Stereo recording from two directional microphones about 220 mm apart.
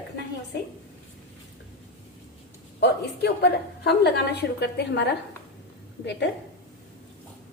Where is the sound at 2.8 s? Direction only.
50° left (ahead or behind).